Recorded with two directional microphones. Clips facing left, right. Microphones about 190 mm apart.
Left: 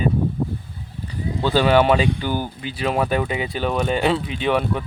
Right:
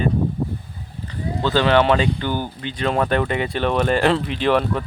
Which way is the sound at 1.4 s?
10° left (ahead or behind).